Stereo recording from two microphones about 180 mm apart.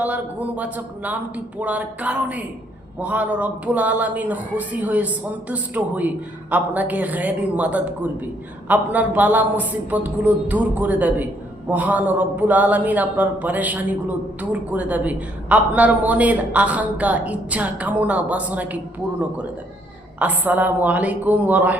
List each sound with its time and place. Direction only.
0.0 s speech: 10° right (ahead or behind)
20.1 s speech: 10° right (ahead or behind)